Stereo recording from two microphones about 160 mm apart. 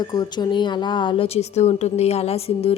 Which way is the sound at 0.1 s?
25° left (ahead or behind).